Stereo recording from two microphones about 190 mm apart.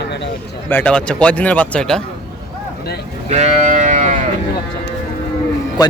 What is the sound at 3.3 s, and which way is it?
Sheep, 35° right (ahead or behind).